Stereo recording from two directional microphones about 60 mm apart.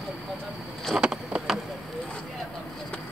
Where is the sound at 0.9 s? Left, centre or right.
Centre.